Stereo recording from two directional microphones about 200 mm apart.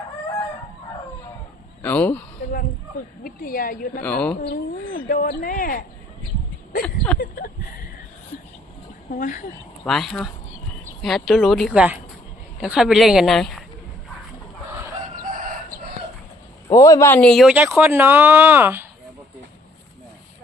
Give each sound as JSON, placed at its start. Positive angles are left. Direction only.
{"t": 1.8, "sound": "speech", "side_deg": 10}
{"t": 3.2, "sound": "a woman's voice", "side_deg": 45}
{"t": 4.0, "sound": "speech", "side_deg": 5}
{"t": 4.4, "sound": "speech", "side_deg": 45}
{"t": 6.8, "sound": "a sound", "side_deg": 5}
{"t": 7.2, "sound": "speech", "side_deg": 45}
{"t": 9.0, "sound": "speech", "side_deg": 45}
{"t": 9.8, "sound": "speech", "side_deg": 0}
{"t": 15.2, "sound": "chicken", "side_deg": -45}
{"t": 16.6, "sound": "speech", "side_deg": 15}